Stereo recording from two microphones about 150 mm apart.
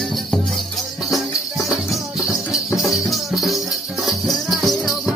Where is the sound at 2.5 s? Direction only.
Centre (ahead or behind).